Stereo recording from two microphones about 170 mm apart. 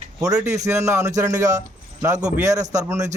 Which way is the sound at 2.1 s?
45° right (ahead or behind).